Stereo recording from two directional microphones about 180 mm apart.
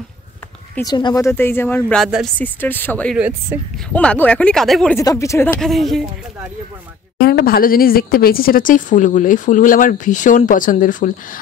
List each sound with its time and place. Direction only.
0.7 s speech: 25° left (ahead or behind)
2.0 s speech: centre (ahead or behind)
2.3 s speech: 10° left (ahead or behind)
3.2 s speech: 10° right (ahead or behind)
3.9 s speech: 5° left (ahead or behind)
4.9 s speech: 15° left (ahead or behind)
5.7 s speech: centre (ahead or behind)
7.2 s speech: 60° left (ahead or behind)